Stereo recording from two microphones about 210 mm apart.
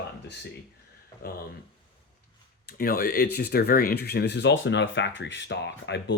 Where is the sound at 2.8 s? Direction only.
45° left (ahead or behind).